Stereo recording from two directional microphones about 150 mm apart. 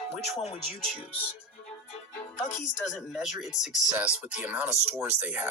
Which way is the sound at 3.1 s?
Centre (ahead or behind).